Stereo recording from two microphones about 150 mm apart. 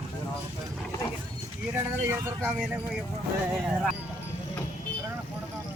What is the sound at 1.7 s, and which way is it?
Speech, 15° right (ahead or behind).